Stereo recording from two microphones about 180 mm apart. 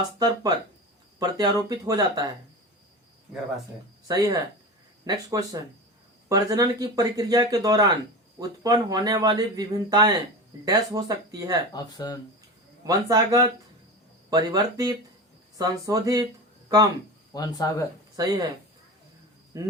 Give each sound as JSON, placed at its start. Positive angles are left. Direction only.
{"t": 1.2, "sound": "speech", "side_deg": -20}
{"t": 4.1, "sound": "speech", "side_deg": -20}
{"t": 11.7, "sound": "speech", "side_deg": 20}
{"t": 12.8, "sound": "speech", "side_deg": -20}
{"t": 17.3, "sound": "speech", "side_deg": 20}
{"t": 18.2, "sound": "speech", "side_deg": -20}
{"t": 19.5, "sound": "speech", "side_deg": -20}